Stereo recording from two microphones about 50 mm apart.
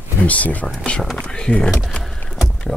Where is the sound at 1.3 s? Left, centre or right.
Centre.